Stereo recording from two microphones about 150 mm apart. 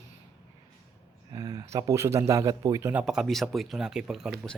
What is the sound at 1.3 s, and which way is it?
A man's voice, 25° right (ahead or behind).